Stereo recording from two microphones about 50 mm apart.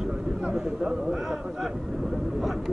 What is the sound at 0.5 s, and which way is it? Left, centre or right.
Speech, centre.